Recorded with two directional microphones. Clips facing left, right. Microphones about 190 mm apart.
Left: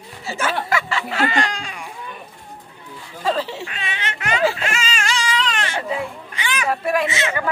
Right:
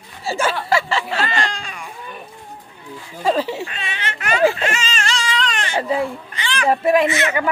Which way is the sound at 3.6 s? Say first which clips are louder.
Even; 15° left (ahead or behind).